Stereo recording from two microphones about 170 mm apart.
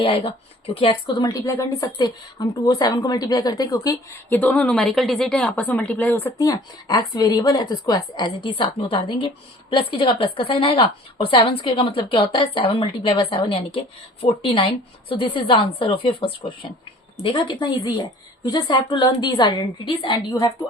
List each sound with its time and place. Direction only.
0.0 s a woman's voice: 30° left (ahead or behind)